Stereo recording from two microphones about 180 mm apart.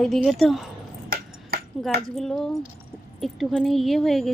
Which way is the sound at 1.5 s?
55° right (ahead or behind).